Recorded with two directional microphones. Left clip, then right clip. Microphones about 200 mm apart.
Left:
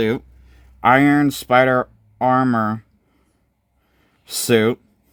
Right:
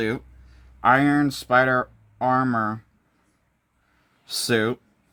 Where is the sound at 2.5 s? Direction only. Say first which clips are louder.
Left 4 dB; 40° left (ahead or behind).